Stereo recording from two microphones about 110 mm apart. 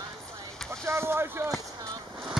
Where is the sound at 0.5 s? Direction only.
5° left (ahead or behind).